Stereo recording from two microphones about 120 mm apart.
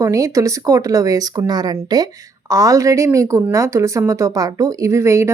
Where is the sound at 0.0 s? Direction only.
25° right (ahead or behind).